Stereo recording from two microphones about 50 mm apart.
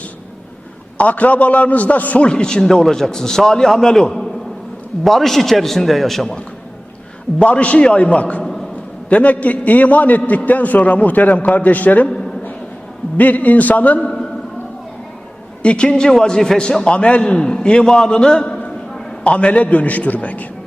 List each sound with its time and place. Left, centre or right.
0.9 s a man's voice: left
2.2 s a man's voice: centre
7.3 s a man's voice: left
13.1 s a man's voice: left
15.6 s a man's voice: left
16.8 s a man's voice: left